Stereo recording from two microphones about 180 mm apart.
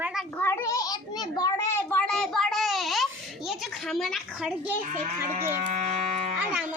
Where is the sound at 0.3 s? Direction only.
15° left (ahead or behind).